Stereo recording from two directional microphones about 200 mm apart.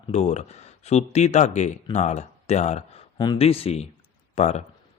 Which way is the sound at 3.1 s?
20° left (ahead or behind).